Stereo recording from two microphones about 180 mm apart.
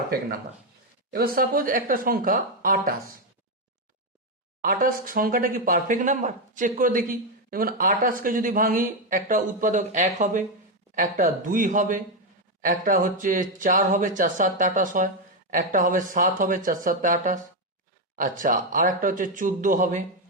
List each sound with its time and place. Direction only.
1.1 s speech: 55° right (ahead or behind)
4.6 s speech: 50° right (ahead or behind)